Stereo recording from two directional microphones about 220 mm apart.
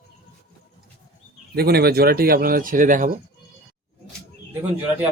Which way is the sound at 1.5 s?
45° right (ahead or behind).